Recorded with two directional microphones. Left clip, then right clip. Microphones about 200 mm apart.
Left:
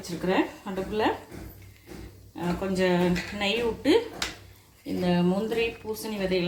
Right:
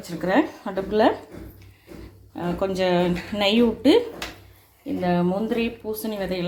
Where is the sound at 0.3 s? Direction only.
45° right (ahead or behind).